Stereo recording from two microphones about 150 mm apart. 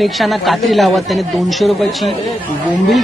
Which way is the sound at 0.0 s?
Centre (ahead or behind).